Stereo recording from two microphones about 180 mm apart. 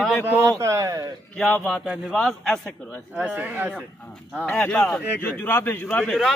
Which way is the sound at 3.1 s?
5° right (ahead or behind).